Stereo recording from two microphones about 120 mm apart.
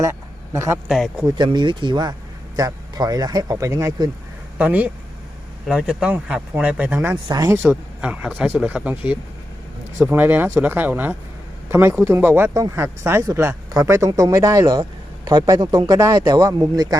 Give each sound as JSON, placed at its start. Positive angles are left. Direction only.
{"t": 0.0, "sound": "a sound", "side_deg": -25}
{"t": 0.9, "sound": "speech", "side_deg": 0}
{"t": 1.4, "sound": "speech", "side_deg": -40}
{"t": 4.5, "sound": "speech", "side_deg": -15}
{"t": 7.3, "sound": "speech", "side_deg": -30}